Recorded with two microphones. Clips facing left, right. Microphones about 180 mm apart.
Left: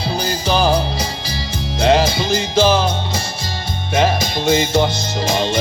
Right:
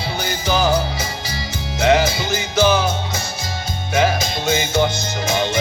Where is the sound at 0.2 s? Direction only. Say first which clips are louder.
Left 2 dB; 30° left (ahead or behind).